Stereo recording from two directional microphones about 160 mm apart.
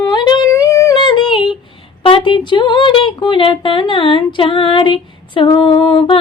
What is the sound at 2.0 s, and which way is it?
Speech, 30° left (ahead or behind).